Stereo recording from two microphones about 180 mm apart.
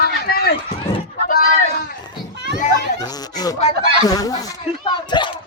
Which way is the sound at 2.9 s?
20° left (ahead or behind).